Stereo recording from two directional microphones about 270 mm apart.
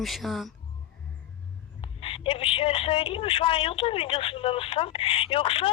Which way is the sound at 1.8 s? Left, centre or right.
Centre.